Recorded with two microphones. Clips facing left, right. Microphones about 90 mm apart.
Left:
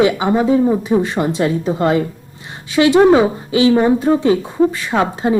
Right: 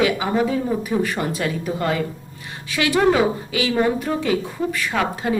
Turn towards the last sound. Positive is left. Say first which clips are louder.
# left 6 dB
turn(degrees=30)  # may be behind; listen again after turning